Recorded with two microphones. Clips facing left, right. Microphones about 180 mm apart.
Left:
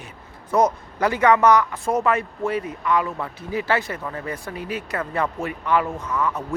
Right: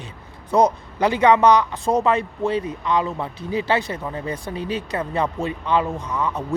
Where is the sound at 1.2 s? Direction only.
15° right (ahead or behind).